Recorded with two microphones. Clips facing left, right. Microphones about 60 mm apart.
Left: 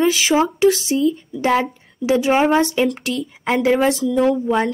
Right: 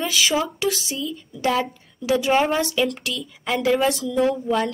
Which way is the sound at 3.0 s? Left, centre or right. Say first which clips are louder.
Left 6 dB; left.